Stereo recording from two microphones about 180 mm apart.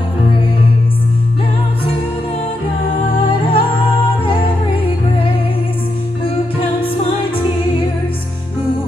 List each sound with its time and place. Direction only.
3.3 s music: 30° left (ahead or behind)